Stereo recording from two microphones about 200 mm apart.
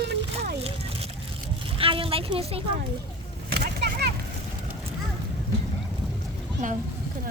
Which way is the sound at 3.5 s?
55° right (ahead or behind).